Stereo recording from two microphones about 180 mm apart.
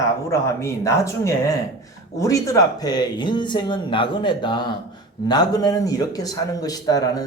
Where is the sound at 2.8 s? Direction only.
25° left (ahead or behind).